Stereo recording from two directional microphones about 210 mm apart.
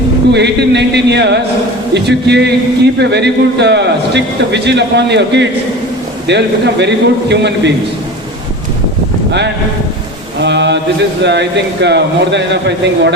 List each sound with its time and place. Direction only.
0.3 s a man's voice: 55° right (ahead or behind)
10.4 s a man's voice: 55° right (ahead or behind)